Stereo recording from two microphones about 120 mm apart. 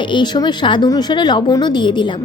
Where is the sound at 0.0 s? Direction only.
40° left (ahead or behind).